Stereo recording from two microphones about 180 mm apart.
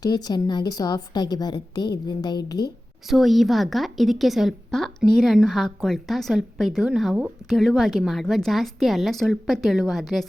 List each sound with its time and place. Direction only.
0.0 s a woman's voice: 20° left (ahead or behind)
3.1 s a woman's voice: centre (ahead or behind)